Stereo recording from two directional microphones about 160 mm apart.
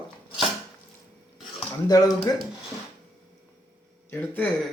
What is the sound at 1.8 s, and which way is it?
Speech, 25° left (ahead or behind).